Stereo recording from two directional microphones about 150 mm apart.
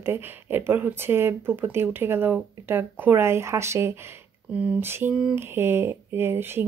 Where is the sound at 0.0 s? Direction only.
15° right (ahead or behind).